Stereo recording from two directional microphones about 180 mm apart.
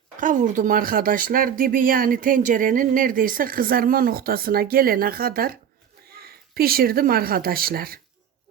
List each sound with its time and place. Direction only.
0.2 s speech: 45° right (ahead or behind)